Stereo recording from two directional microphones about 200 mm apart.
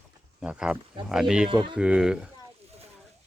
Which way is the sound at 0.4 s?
5° right (ahead or behind).